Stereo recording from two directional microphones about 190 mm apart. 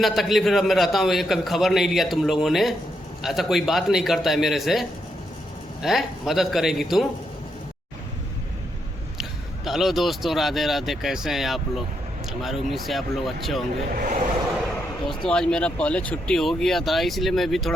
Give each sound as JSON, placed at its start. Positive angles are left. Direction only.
{"t": 0.0, "sound": "a man's voice", "side_deg": 0}
{"t": 9.6, "sound": "a man's voice", "side_deg": 0}
{"t": 13.9, "sound": "speech", "side_deg": -50}
{"t": 15.0, "sound": "a man's voice", "side_deg": 5}